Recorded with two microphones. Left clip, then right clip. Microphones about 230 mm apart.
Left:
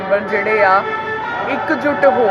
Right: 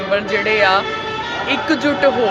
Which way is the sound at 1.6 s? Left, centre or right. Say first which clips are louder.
Left 2 dB; centre.